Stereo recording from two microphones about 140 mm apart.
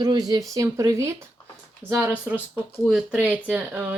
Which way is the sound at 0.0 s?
30° right (ahead or behind).